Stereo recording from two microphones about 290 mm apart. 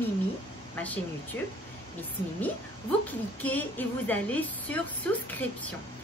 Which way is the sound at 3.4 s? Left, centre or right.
Centre.